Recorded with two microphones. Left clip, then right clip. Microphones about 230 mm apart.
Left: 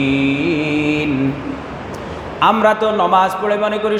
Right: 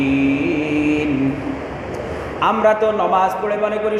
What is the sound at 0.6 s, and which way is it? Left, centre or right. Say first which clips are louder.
Mantra: left 1 dB; left.